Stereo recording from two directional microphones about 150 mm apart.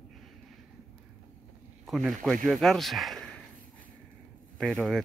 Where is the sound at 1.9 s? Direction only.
Centre (ahead or behind).